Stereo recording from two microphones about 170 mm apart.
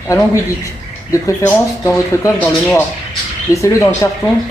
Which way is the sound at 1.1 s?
15° left (ahead or behind).